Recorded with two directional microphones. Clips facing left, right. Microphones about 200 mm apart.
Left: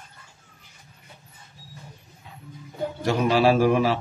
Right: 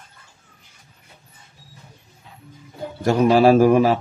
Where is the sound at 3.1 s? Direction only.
45° right (ahead or behind).